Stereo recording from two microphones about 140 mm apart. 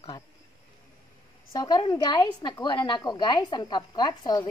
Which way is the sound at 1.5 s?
30° left (ahead or behind).